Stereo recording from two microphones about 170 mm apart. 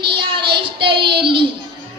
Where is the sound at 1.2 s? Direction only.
30° right (ahead or behind).